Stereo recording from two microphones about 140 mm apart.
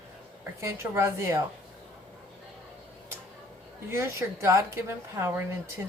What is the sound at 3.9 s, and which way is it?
A woman's voice, 20° right (ahead or behind).